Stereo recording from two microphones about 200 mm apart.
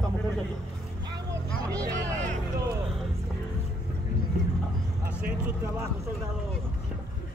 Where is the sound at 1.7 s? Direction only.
15° right (ahead or behind).